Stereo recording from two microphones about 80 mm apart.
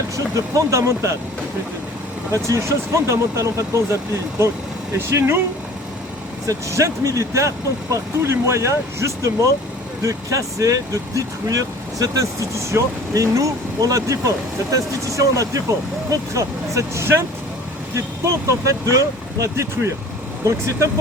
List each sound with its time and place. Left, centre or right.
0.3 s speech: right
2.3 s speech: right
4.9 s speech: right
6.5 s speech: right